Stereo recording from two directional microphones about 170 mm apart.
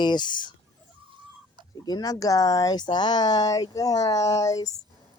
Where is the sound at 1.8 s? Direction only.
20° left (ahead or behind).